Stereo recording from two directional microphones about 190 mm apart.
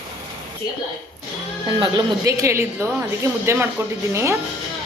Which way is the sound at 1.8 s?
20° right (ahead or behind).